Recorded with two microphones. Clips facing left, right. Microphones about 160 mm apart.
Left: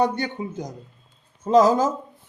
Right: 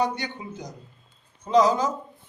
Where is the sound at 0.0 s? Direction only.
50° left (ahead or behind).